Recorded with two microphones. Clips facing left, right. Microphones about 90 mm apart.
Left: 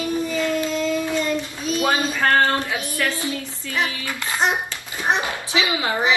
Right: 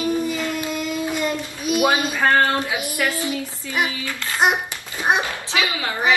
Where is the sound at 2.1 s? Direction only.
15° right (ahead or behind).